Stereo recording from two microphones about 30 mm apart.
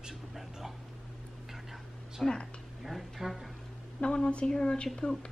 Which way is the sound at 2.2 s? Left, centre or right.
Left.